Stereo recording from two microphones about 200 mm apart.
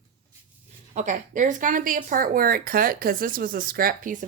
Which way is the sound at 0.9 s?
40° right (ahead or behind).